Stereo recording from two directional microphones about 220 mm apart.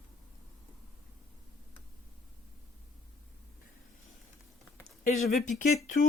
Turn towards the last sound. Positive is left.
turn(degrees=35)  # may be behind; listen again after turning